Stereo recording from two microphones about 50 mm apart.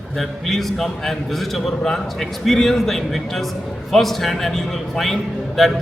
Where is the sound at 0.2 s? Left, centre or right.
Centre.